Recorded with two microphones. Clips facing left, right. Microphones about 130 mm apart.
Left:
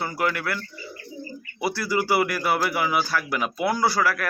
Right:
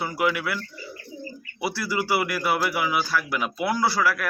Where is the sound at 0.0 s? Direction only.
5° right (ahead or behind).